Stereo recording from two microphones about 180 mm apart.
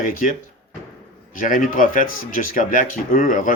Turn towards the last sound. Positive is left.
turn(degrees=45)  # may be behind; listen again after turning